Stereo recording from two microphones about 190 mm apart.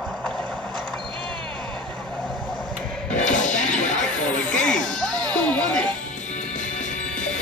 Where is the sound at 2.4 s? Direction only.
5° left (ahead or behind).